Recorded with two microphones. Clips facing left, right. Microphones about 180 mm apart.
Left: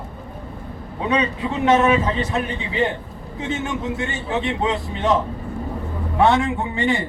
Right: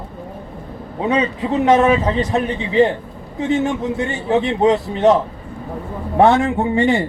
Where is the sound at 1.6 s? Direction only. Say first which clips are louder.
Right 2 dB; 35° right (ahead or behind).